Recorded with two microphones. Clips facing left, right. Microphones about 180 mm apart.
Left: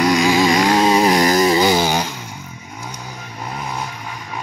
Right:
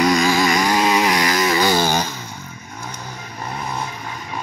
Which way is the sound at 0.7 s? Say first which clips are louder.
Left 4 dB; 30° left (ahead or behind).